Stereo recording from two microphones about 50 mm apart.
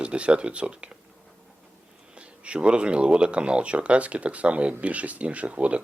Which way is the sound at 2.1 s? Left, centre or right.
Right.